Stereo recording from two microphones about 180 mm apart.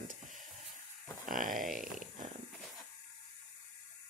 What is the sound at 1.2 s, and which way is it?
Speech, 50° right (ahead or behind).